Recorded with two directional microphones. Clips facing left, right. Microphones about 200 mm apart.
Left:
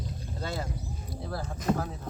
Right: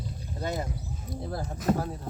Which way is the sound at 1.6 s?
5° right (ahead or behind).